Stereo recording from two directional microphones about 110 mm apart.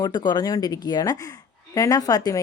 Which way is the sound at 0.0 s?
40° left (ahead or behind).